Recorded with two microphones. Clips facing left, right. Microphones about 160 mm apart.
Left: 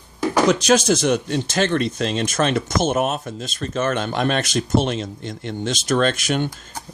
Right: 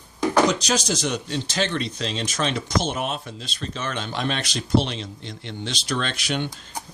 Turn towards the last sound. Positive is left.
turn(degrees=45)  # may be behind; listen again after turning